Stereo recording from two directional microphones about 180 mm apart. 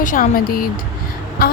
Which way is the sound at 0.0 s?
45° left (ahead or behind).